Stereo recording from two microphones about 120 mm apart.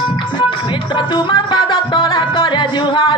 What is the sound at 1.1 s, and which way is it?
Music, 40° left (ahead or behind).